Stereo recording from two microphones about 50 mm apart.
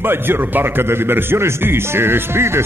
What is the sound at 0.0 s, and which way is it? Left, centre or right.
Speech, right.